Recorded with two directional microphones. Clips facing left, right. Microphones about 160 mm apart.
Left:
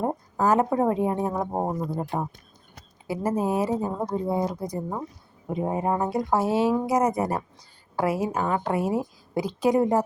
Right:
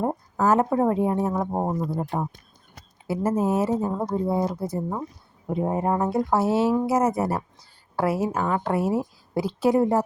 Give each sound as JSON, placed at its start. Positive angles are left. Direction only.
{"t": 0.3, "sound": "a woman's voice", "side_deg": 15}
{"t": 1.5, "sound": "speech", "side_deg": 5}
{"t": 1.9, "sound": "a woman's voice", "side_deg": 15}